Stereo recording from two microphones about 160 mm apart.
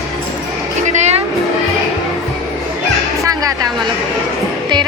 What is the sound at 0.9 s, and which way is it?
Music, 45° right (ahead or behind).